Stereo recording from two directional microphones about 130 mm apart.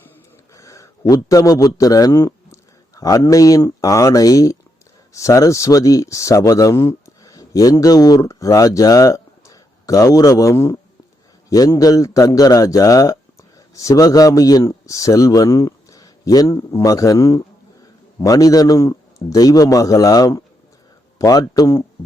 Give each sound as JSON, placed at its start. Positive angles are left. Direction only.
{"t": 0.5, "sound": "a man's voice", "side_deg": 25}